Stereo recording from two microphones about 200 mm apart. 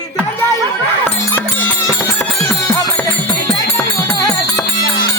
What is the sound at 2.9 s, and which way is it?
Music, 5° left (ahead or behind).